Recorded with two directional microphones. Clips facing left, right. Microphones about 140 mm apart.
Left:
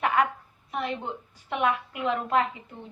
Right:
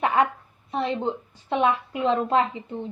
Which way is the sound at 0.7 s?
30° right (ahead or behind).